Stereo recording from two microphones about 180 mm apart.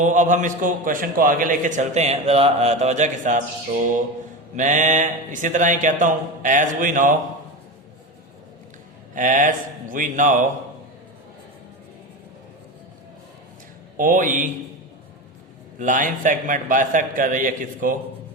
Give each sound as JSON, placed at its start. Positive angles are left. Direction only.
{"t": 0.0, "sound": "a man's voice", "side_deg": -45}
{"t": 4.5, "sound": "a man's voice", "side_deg": -45}
{"t": 9.1, "sound": "a man's voice", "side_deg": -45}
{"t": 13.9, "sound": "a man's voice", "side_deg": -50}
{"t": 15.8, "sound": "a man's voice", "side_deg": -45}